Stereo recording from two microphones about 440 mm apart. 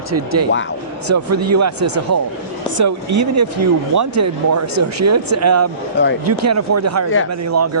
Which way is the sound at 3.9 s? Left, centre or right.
Right.